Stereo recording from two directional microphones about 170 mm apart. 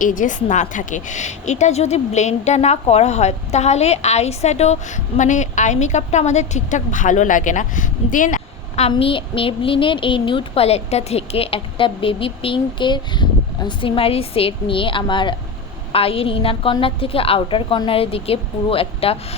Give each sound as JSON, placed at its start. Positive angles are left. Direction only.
{"t": 0.0, "sound": "a woman's voice", "side_deg": 50}
{"t": 8.9, "sound": "speech", "side_deg": 30}